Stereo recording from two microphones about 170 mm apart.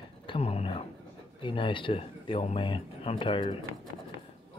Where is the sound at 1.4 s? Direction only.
30° left (ahead or behind).